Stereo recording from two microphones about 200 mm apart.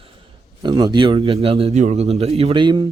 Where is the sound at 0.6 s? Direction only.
20° right (ahead or behind).